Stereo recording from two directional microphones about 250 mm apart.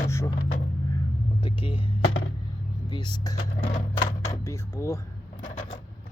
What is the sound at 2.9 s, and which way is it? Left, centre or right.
Speech, centre.